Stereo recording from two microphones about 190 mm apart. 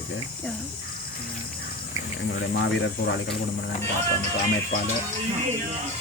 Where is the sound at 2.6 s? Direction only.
70° left (ahead or behind).